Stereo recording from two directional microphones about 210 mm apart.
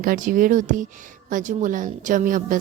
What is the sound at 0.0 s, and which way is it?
A woman's voice, 40° right (ahead or behind).